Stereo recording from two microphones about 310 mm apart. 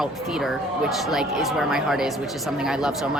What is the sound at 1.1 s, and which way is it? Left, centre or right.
Speech, centre.